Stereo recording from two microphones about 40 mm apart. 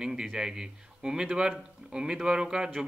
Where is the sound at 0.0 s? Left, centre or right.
Centre.